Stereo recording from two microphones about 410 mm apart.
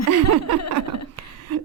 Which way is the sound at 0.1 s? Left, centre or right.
Right.